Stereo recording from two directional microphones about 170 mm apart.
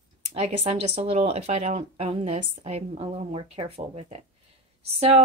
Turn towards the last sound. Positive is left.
turn(degrees=-35)  # may be behind; listen again after turning